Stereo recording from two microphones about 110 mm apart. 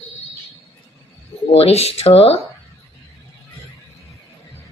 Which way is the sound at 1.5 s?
65° left (ahead or behind).